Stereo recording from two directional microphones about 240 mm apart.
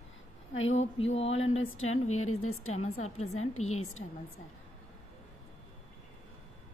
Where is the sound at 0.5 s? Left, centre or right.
Left.